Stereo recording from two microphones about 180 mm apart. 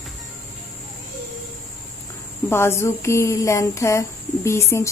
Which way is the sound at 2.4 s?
15° left (ahead or behind).